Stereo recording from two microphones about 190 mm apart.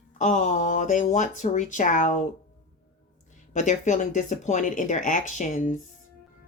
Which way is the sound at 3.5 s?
40° left (ahead or behind).